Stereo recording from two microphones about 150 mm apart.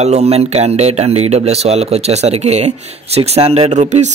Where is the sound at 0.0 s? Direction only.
45° right (ahead or behind).